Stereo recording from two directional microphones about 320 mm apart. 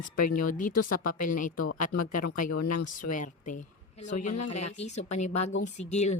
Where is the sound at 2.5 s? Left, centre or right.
Left.